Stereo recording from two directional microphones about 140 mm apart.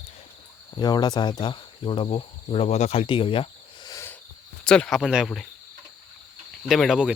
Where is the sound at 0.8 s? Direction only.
30° left (ahead or behind).